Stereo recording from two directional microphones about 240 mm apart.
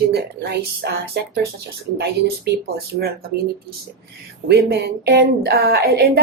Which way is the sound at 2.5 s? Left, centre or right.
Right.